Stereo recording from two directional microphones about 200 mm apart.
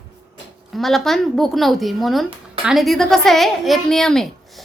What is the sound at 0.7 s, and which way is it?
A woman's voice, centre (ahead or behind).